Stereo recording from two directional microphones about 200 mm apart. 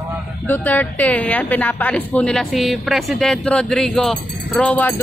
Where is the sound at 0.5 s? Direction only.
10° left (ahead or behind).